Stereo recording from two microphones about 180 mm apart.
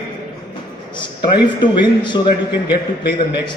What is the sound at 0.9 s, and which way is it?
A man's voice, 25° left (ahead or behind).